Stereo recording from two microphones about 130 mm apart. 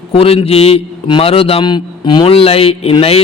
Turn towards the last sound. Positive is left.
turn(degrees=50)  # may be behind; listen again after turning